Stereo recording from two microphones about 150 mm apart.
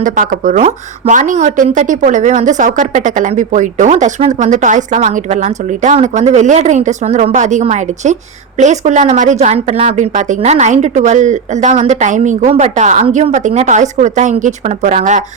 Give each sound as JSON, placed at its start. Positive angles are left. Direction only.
{"t": 0.0, "sound": "a woman's voice", "side_deg": -60}